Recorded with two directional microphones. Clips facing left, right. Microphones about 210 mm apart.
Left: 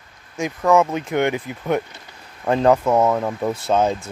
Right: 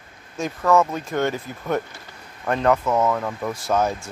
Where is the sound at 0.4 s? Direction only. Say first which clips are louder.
Left 2 dB; 15° left (ahead or behind).